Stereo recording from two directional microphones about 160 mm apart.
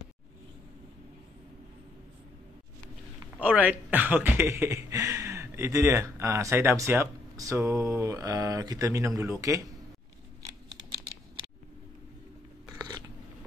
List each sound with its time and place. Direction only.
3.3 s speech: 10° right (ahead or behind)
12.7 s scissors: 25° right (ahead or behind)